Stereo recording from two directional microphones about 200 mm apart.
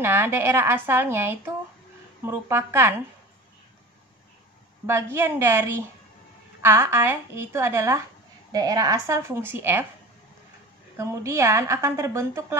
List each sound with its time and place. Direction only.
0.0 s a woman's voice: 10° right (ahead or behind)
4.8 s a woman's voice: 15° right (ahead or behind)
11.0 s a woman's voice: 15° right (ahead or behind)